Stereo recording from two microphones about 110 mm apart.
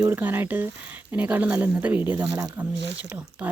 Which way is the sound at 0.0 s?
20° right (ahead or behind).